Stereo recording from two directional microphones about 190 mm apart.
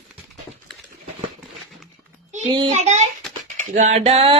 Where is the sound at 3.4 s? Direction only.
40° right (ahead or behind).